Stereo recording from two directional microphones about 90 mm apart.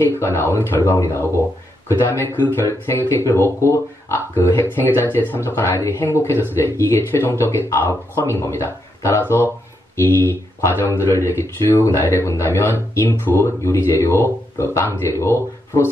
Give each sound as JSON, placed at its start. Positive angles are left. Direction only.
{"t": 0.0, "sound": "speech", "side_deg": 25}